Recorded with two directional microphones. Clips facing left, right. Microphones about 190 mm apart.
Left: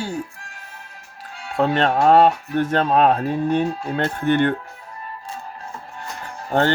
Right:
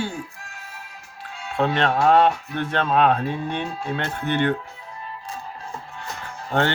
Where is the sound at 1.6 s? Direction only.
40° left (ahead or behind).